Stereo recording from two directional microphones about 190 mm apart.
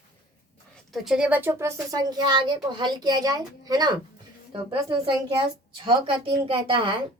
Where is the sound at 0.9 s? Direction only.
Centre (ahead or behind); by 6.9 s 25° right (ahead or behind).